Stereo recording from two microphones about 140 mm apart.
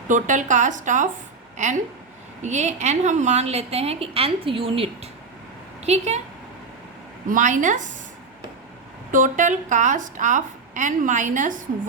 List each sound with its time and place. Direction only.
0.1 s a woman's voice: 60° right (ahead or behind)
7.3 s a woman's voice: 65° right (ahead or behind)
9.1 s a woman's voice: 65° right (ahead or behind)